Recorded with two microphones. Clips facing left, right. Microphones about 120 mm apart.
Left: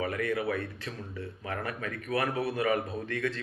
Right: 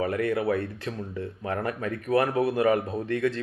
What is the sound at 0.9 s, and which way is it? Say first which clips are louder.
Speech: right 6 dB; 50° right (ahead or behind).